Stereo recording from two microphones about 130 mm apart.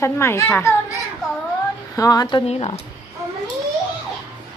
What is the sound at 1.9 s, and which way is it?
Speech, 30° left (ahead or behind).